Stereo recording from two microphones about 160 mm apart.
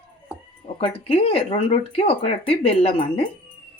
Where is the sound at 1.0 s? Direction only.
35° left (ahead or behind).